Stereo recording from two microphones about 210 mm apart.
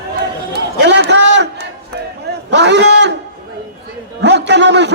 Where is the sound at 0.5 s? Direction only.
55° right (ahead or behind).